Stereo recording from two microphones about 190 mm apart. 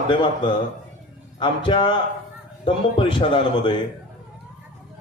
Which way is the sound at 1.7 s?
25° left (ahead or behind).